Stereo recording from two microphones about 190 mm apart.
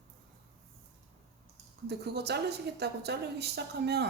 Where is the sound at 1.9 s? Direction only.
60° right (ahead or behind).